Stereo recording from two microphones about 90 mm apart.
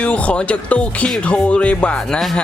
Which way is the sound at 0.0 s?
15° left (ahead or behind).